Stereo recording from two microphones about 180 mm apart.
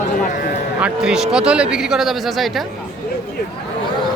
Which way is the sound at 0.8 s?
5° right (ahead or behind).